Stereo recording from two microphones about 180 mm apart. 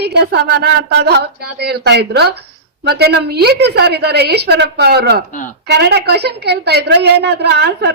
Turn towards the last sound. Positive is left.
turn(degrees=-65)  # may be behind; listen again after turning